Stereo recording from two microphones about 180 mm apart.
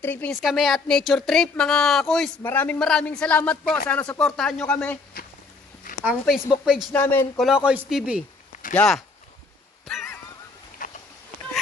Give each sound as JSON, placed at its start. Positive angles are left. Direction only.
{"t": 0.0, "sound": "a man's voice", "side_deg": 10}
{"t": 0.4, "sound": "a man's voice", "side_deg": 0}
{"t": 6.0, "sound": "speech", "side_deg": 0}
{"t": 6.9, "sound": "a man's voice", "side_deg": 10}
{"t": 7.3, "sound": "speech", "side_deg": -5}
{"t": 10.8, "sound": "a sound", "side_deg": 50}